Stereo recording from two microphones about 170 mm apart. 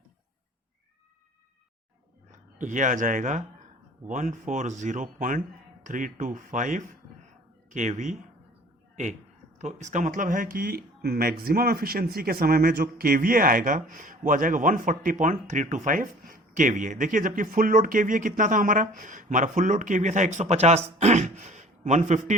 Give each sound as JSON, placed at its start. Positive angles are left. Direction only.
{"t": 2.6, "sound": "speech", "side_deg": -50}
{"t": 9.6, "sound": "speech", "side_deg": -45}